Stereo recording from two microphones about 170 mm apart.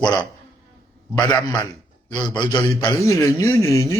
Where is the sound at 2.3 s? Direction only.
25° left (ahead or behind).